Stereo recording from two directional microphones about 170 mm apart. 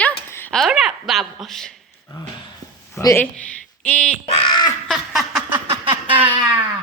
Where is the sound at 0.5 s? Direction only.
Centre (ahead or behind).